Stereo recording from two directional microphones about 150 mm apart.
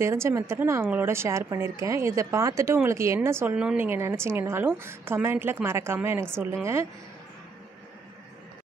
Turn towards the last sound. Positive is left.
turn(degrees=-15)  # may be behind; listen again after turning